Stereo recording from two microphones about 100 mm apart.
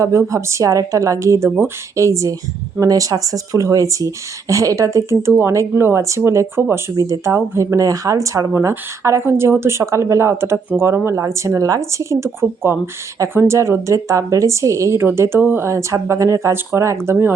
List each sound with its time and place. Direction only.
0.0 s speech: 30° right (ahead or behind)
6.9 s speech: 35° right (ahead or behind)